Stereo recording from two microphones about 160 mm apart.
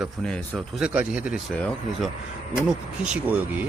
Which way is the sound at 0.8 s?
5° right (ahead or behind).